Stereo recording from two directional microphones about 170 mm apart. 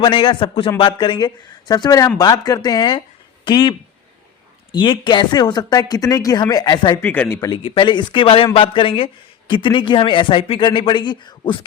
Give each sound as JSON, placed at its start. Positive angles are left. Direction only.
{"t": 0.0, "sound": "a man's voice", "side_deg": 30}
{"t": 7.0, "sound": "speech", "side_deg": 10}
{"t": 7.5, "sound": "a man's voice", "side_deg": 30}